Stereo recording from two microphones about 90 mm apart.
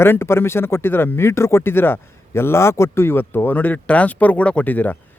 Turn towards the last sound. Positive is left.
turn(degrees=20)  # may be behind; listen again after turning